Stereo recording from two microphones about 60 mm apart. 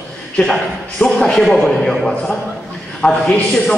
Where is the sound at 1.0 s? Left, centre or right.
Centre.